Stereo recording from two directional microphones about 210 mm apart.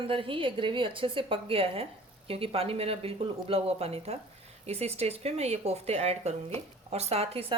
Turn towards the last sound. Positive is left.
turn(degrees=-30)  # may be behind; listen again after turning